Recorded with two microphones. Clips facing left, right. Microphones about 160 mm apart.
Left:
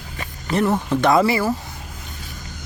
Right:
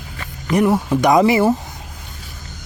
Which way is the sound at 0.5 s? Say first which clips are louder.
Right 3 dB; 10° right (ahead or behind).